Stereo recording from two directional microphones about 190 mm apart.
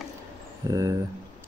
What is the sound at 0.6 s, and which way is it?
Speech, 15° right (ahead or behind).